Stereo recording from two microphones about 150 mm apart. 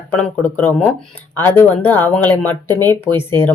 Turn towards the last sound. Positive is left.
turn(degrees=15)  # may be behind; listen again after turning